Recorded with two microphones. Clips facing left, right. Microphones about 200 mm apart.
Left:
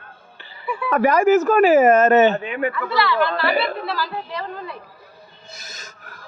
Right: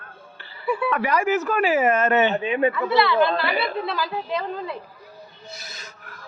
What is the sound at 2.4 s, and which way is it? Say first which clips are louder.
Speech: right 3 dB; 20° right (ahead or behind).